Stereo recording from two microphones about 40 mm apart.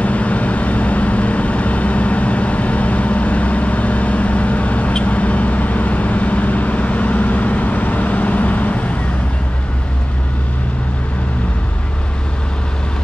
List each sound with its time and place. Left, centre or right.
0.0 s vehicle: left